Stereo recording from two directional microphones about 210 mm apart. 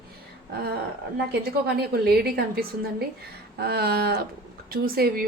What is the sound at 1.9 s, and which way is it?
A woman's voice, 50° right (ahead or behind).